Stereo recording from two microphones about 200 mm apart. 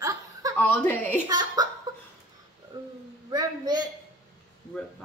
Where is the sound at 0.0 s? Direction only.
15° right (ahead or behind).